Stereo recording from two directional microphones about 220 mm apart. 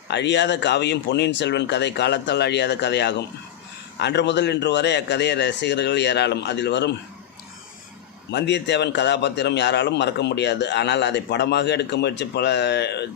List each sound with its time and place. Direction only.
0.1 s a man's voice: 50° left (ahead or behind)
8.3 s a man's voice: 50° left (ahead or behind)